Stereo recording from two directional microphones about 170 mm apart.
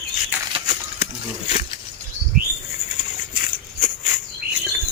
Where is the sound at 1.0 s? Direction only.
45° left (ahead or behind).